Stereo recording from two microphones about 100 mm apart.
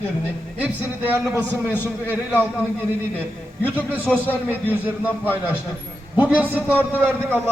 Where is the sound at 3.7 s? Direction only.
15° right (ahead or behind).